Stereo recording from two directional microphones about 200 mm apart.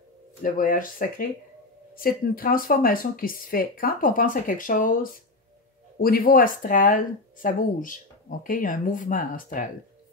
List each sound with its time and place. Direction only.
0.4 s speech: 45° left (ahead or behind)